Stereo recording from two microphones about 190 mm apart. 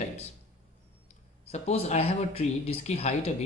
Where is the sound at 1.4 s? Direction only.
35° left (ahead or behind).